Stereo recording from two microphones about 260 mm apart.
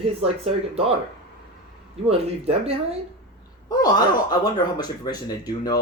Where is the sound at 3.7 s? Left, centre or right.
Centre.